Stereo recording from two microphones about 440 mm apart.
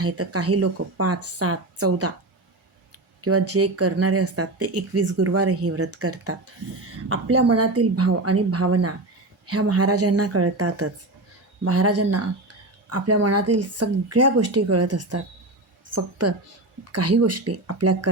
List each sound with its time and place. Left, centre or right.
0.0 s speech: right
3.2 s speech: right
7.3 s a woman's voice: right